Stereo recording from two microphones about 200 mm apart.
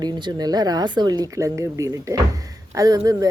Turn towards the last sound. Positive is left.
turn(degrees=-15)  # may be behind; listen again after turning